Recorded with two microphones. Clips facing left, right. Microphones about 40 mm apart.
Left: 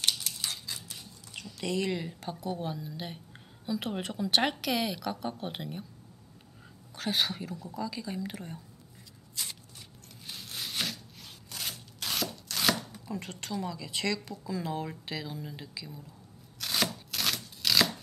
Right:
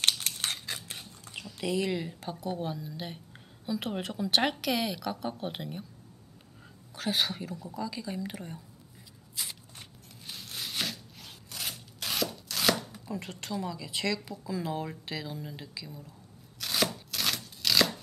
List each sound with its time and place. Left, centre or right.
0.0 s crushing: right
1.3 s speech: centre
7.0 s speech: centre
9.3 s shuffling cards: centre
10.2 s a sound: centre
11.5 s chopping: centre
16.5 s a sound: centre